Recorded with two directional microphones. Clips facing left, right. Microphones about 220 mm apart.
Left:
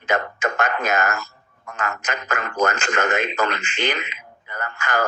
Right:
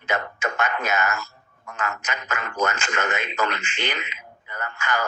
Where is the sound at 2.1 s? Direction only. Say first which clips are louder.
Left 4 dB; 40° left (ahead or behind).